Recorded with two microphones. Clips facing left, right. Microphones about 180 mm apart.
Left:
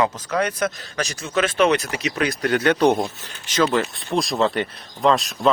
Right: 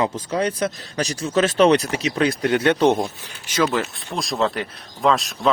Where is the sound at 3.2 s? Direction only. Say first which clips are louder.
Left 1 dB; 10° right (ahead or behind).